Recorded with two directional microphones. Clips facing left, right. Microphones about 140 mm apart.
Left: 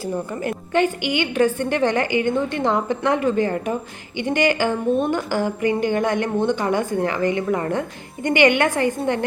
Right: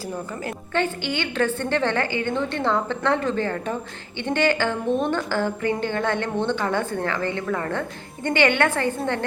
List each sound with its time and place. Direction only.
0.7 s a woman's voice: 15° left (ahead or behind)